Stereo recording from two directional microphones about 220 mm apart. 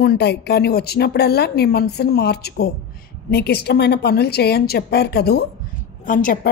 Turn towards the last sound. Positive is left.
turn(degrees=40)  # may be behind; listen again after turning